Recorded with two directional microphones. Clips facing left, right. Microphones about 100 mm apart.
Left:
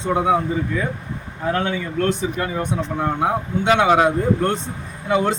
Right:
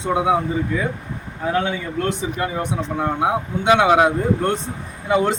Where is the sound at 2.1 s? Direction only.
25° right (ahead or behind).